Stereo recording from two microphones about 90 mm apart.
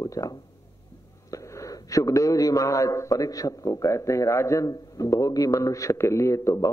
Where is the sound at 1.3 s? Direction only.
35° left (ahead or behind).